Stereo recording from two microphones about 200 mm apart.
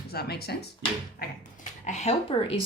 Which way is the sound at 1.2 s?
40° left (ahead or behind).